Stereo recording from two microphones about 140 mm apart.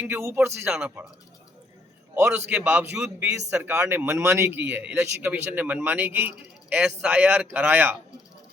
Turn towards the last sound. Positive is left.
turn(degrees=-10)  # may be behind; listen again after turning